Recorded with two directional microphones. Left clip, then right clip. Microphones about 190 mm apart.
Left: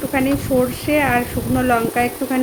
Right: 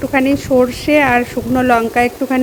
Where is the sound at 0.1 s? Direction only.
50° right (ahead or behind).